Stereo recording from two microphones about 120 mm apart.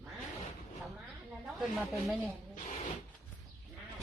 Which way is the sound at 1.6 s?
Centre (ahead or behind).